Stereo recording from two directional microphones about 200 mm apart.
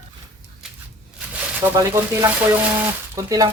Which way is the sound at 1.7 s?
15° right (ahead or behind).